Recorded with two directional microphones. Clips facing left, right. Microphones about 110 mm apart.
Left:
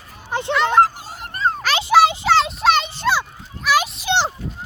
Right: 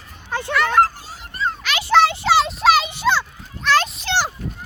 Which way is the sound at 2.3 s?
Centre (ahead or behind).